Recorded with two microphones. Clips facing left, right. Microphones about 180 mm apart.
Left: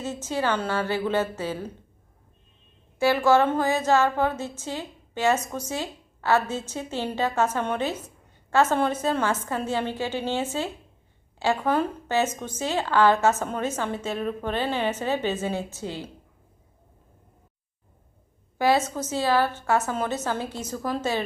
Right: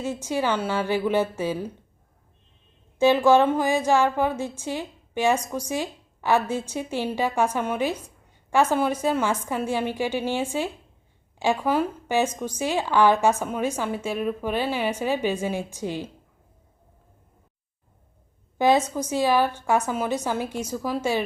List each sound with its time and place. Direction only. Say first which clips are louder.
0.0 s a woman's voice: right 2 dB; 15° right (ahead or behind)
3.0 s a woman's voice: right 3 dB; 20° right (ahead or behind)
18.5 s a sound: right 2 dB; 20° right (ahead or behind)
18.9 s a woman's voice: right 2 dB; 15° right (ahead or behind)